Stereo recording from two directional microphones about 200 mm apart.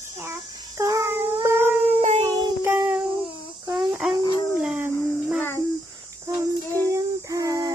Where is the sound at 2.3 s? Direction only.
20° right (ahead or behind).